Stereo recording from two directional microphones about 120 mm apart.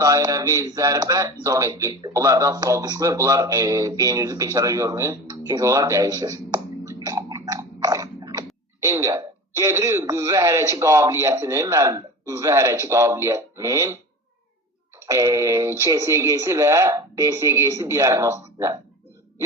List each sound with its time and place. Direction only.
0.0 s a man's voice: 30° right (ahead or behind)
15.0 s a man's voice: 25° right (ahead or behind)